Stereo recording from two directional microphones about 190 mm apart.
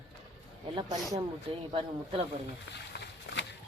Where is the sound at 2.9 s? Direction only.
70° left (ahead or behind).